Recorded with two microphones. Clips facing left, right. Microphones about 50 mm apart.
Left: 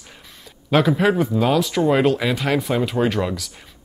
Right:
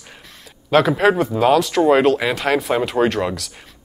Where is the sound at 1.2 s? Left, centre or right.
Centre.